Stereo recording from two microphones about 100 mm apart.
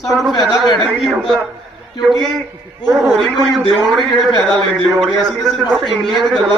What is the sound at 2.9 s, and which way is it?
A man's voice, centre (ahead or behind).